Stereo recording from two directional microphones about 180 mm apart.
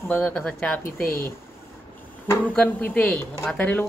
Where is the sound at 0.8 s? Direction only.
55° left (ahead or behind).